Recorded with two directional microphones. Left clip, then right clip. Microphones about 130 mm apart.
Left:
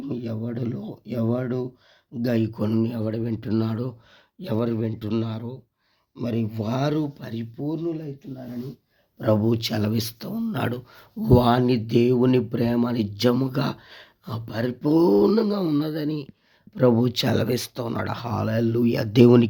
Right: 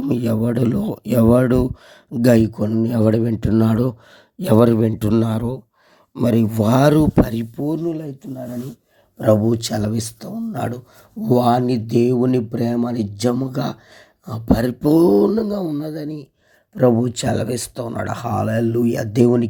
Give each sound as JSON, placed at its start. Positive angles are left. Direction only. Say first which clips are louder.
{"t": 0.0, "sound": "speech", "louder": "right 11 dB", "side_deg": -90}
{"t": 2.1, "sound": "speech", "louder": "right 10 dB", "side_deg": -75}
{"t": 3.6, "sound": "speech", "louder": "right 10 dB", "side_deg": -60}
{"t": 4.4, "sound": "speech", "louder": "right 12 dB", "side_deg": -90}
{"t": 4.9, "sound": "speech", "louder": "right 9 dB", "side_deg": -70}
{"t": 9.1, "sound": "speech", "louder": "right 7 dB", "side_deg": -50}
{"t": 9.4, "sound": "speech", "louder": "right 4 dB", "side_deg": -30}
{"t": 9.9, "sound": "speech", "louder": "right 2 dB", "side_deg": -15}
{"t": 14.4, "sound": "speech", "louder": "right 8 dB", "side_deg": -40}
{"t": 14.9, "sound": "speech", "louder": "right 4 dB", "side_deg": -25}
{"t": 15.3, "sound": "mantra", "louder": "right 1 dB", "side_deg": 0}
{"t": 15.9, "sound": "speech", "louder": "even", "side_deg": -10}
{"t": 18.0, "sound": "speech", "louder": "right 6 dB", "side_deg": -25}